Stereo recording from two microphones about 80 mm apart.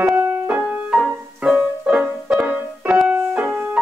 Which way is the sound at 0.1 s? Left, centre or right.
Right.